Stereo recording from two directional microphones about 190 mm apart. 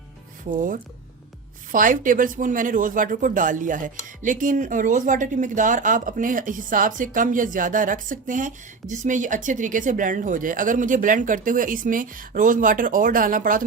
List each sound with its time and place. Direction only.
0.5 s speech: 45° right (ahead or behind)